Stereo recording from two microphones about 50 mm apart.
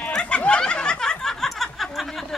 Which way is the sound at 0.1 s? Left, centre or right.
Left.